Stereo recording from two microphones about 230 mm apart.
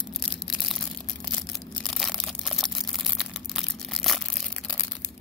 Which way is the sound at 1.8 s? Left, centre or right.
Centre.